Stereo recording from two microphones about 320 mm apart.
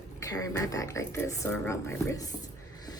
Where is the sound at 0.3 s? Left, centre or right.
Centre.